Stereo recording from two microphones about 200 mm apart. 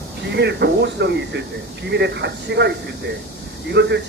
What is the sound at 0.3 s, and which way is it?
Speech, 60° right (ahead or behind).